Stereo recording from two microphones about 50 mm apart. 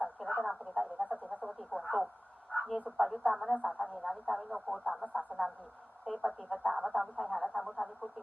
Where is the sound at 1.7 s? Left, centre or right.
Left.